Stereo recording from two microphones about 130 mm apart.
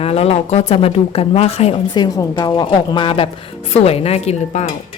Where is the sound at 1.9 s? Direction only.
30° left (ahead or behind); by 4.7 s 60° left (ahead or behind).